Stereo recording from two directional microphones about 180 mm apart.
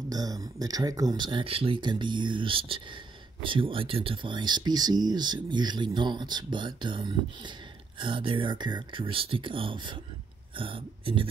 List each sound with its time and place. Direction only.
0.1 s speech: 20° right (ahead or behind)